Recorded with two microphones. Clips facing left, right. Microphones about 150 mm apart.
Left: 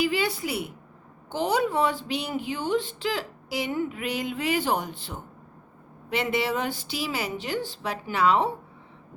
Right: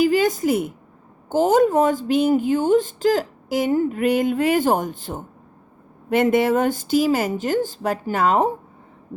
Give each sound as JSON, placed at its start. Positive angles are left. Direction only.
{"t": 0.0, "sound": "speech", "side_deg": -45}